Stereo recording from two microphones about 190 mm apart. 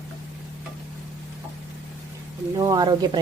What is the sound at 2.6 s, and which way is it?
Speech, 20° right (ahead or behind).